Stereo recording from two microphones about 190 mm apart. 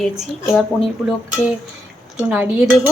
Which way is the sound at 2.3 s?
5° right (ahead or behind).